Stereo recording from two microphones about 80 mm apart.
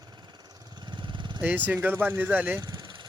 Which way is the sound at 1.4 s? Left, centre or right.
Right.